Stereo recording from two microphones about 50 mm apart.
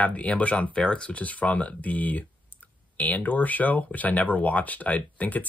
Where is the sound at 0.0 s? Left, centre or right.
Left.